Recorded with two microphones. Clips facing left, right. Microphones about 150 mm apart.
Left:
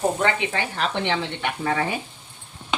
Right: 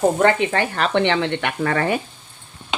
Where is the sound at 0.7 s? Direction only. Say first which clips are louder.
Right 6 dB; 70° right (ahead or behind).